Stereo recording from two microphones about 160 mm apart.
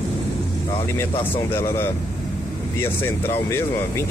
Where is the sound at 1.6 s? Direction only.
15° left (ahead or behind).